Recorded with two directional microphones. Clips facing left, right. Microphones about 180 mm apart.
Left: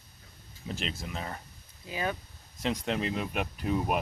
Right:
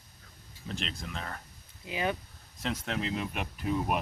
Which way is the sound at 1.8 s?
20° right (ahead or behind).